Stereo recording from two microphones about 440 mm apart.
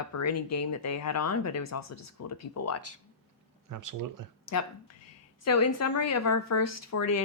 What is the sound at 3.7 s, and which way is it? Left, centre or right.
Speech, right.